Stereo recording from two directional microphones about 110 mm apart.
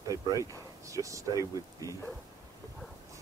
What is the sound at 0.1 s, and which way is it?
Speech, 30° right (ahead or behind).